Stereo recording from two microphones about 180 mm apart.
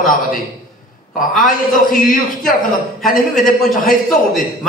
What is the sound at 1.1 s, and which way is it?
Speech, centre (ahead or behind).